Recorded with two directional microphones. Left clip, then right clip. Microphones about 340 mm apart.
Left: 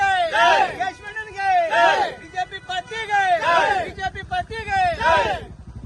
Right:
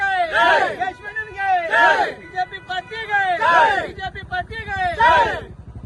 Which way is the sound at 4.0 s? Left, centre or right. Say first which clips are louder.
Left 1 dB; centre.